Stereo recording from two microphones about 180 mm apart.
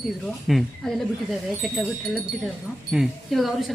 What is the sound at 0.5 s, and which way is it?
Speech, centre (ahead or behind).